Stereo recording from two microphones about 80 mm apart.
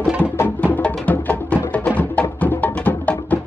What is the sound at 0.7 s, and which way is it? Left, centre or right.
Music, centre.